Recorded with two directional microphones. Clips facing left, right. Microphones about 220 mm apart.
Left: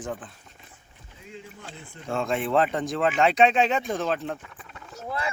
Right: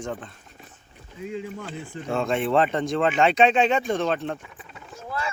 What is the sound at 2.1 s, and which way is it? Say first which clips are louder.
Speech: right 2 dB; centre (ahead or behind).